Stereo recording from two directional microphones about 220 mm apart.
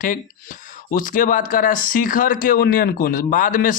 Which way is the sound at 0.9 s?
40° left (ahead or behind).